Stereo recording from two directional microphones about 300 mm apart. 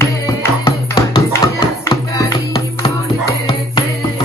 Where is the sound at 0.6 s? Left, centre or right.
Centre.